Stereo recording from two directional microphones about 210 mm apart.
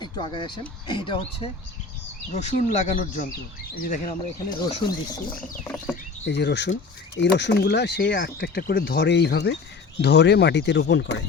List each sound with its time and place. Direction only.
0.0 s speech: 20° left (ahead or behind)
2.3 s speech: 35° left (ahead or behind)
5.6 s patter: 10° left (ahead or behind)
6.2 s speech: 55° left (ahead or behind)